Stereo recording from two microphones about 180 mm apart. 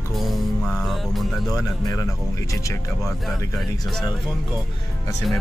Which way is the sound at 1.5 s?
20° left (ahead or behind).